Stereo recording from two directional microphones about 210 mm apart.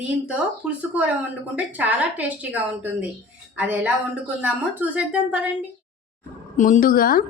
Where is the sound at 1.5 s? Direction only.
5° right (ahead or behind).